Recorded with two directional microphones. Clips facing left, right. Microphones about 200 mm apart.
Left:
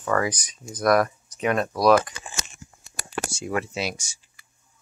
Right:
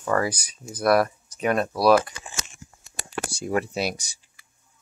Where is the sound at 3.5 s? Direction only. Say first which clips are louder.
Right 3 dB; 40° right (ahead or behind).